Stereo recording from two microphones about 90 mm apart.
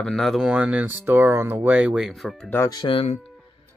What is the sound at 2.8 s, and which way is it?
Speech, 55° left (ahead or behind).